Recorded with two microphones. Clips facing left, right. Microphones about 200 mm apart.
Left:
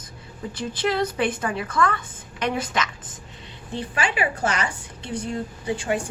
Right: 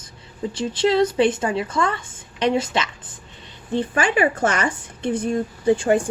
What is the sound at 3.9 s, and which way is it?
A woman's voice, 50° right (ahead or behind).